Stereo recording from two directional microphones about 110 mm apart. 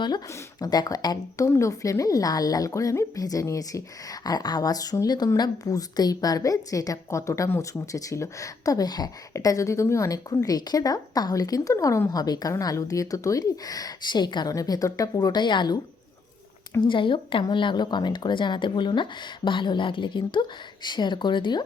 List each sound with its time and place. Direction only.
0.6 s speech: 40° left (ahead or behind)
16.9 s speech: 50° left (ahead or behind)